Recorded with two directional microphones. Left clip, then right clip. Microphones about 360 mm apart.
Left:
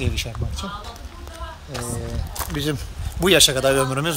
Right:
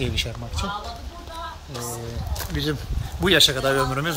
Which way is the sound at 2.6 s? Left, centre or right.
Left.